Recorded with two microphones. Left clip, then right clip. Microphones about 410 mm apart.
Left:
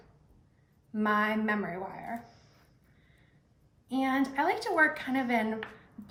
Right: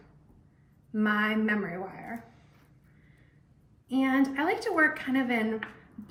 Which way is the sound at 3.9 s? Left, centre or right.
Centre.